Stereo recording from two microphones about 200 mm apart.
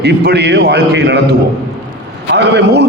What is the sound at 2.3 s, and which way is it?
Speech, 60° right (ahead or behind).